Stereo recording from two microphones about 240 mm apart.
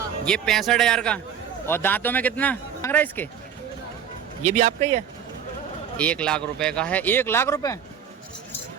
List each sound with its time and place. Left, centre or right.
0.3 s a man's voice: centre
4.4 s a man's voice: right
6.0 s speech: centre